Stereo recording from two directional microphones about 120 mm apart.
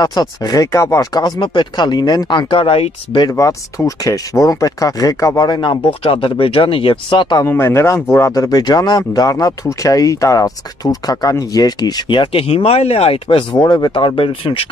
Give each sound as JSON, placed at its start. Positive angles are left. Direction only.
{"t": 0.0, "sound": "speech", "side_deg": 35}
{"t": 3.3, "sound": "speech", "side_deg": 25}
{"t": 7.4, "sound": "speech", "side_deg": 20}